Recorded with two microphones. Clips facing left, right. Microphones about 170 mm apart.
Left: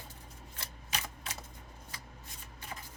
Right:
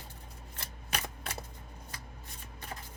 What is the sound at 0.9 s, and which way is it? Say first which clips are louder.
Typewriter: right 3 dB; 60° right (ahead or behind).